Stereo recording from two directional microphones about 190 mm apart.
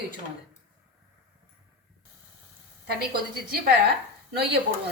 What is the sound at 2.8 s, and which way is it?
Speech, 55° right (ahead or behind).